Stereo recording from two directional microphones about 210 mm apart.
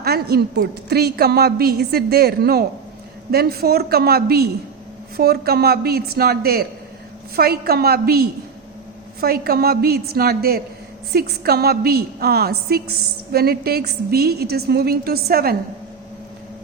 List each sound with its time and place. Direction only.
0.0 s a woman's voice: 50° right (ahead or behind)